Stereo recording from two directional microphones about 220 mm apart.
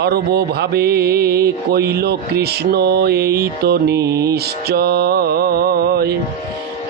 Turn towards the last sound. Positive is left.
turn(degrees=-45)  # may be behind; listen again after turning